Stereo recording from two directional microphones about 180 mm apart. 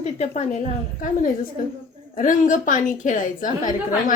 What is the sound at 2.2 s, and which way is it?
A woman's voice, 45° left (ahead or behind).